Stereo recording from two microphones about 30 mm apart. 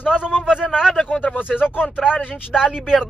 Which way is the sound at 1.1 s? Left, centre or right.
Left.